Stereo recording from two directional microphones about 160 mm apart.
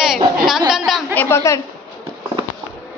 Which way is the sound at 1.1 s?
15° left (ahead or behind).